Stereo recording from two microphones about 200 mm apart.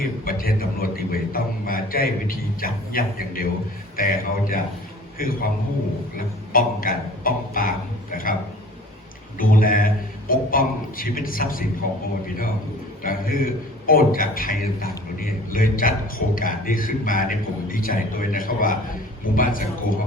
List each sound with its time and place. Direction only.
0.0 s a man's voice: 45° left (ahead or behind)
9.4 s a man's voice: 45° left (ahead or behind)
13.0 s a man's voice: 45° left (ahead or behind)